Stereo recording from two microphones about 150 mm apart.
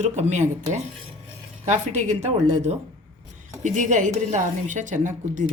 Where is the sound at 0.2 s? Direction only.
50° right (ahead or behind).